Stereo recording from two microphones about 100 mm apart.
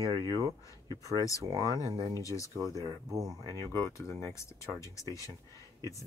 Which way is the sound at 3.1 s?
35° right (ahead or behind).